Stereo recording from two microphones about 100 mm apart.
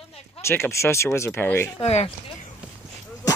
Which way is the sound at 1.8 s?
90° left.